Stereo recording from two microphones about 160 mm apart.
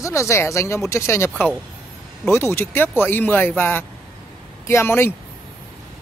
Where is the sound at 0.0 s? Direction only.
20° left (ahead or behind).